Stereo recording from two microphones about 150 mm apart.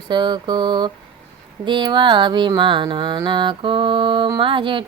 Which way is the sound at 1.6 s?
30° right (ahead or behind).